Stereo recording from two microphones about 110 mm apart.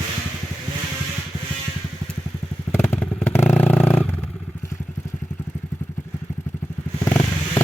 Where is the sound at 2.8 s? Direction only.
20° left (ahead or behind).